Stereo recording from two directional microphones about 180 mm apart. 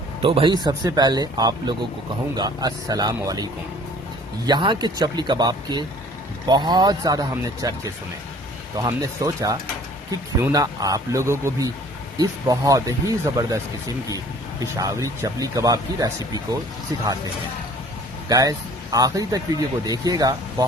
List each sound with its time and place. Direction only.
0.2 s speech: 30° right (ahead or behind)
8.8 s speech: 20° right (ahead or behind)
18.3 s speech: 20° right (ahead or behind)